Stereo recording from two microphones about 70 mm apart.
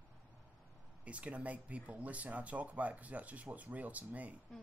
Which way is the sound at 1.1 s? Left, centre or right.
Centre.